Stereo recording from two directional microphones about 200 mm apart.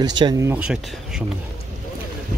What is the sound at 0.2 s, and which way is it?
Speech, 15° right (ahead or behind).